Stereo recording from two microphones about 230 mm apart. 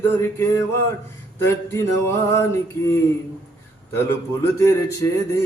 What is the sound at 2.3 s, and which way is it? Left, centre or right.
Speech, centre.